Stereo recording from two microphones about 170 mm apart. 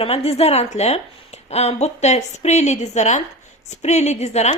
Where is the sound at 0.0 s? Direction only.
35° left (ahead or behind).